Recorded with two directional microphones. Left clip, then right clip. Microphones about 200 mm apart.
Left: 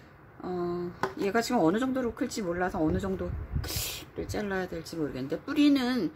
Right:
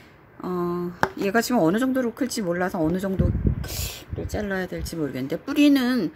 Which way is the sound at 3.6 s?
15° right (ahead or behind).